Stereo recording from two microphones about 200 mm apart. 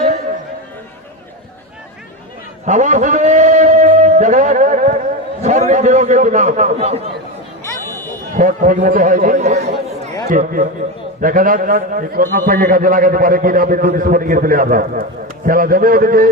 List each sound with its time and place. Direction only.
2.6 s a sound: 35° right (ahead or behind)
5.4 s a man's voice: 35° right (ahead or behind)
8.4 s a man's voice: 40° right (ahead or behind)